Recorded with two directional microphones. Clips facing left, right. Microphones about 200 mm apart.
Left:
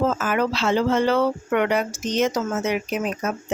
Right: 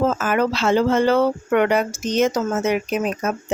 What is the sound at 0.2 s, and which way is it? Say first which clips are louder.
Speech: right 3 dB; 50° right (ahead or behind).